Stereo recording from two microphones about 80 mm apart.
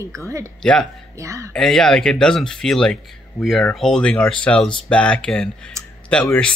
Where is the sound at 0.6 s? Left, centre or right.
Centre.